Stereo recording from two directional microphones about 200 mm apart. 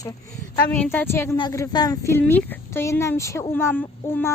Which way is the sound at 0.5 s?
10° left (ahead or behind).